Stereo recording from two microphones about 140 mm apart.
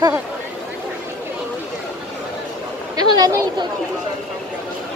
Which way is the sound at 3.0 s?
30° right (ahead or behind).